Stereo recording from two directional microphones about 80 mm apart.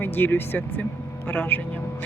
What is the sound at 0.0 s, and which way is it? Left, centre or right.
Speech, left.